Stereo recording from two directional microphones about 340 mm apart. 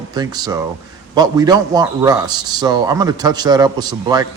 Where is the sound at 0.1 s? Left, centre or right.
Centre.